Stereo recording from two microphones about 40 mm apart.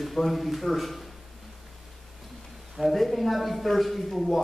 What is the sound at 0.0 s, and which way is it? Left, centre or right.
A man's voice, centre.